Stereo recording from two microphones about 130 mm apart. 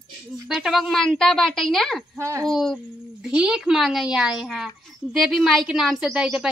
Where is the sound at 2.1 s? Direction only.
25° right (ahead or behind).